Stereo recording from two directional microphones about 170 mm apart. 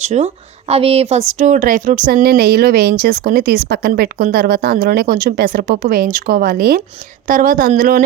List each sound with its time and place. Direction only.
0.0 s a woman's voice: 40° right (ahead or behind); by 6.8 s 60° right (ahead or behind)
7.3 s speech: 50° right (ahead or behind)